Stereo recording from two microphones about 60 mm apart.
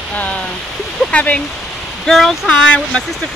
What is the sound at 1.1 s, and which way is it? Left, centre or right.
Speech, left.